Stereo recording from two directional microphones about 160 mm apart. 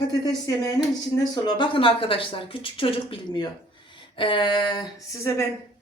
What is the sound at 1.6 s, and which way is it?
A woman's voice, 35° left (ahead or behind).